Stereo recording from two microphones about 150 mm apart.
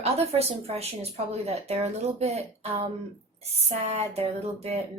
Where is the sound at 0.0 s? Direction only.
45° right (ahead or behind).